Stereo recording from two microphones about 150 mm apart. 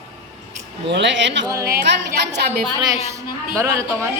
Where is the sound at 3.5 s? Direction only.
20° right (ahead or behind).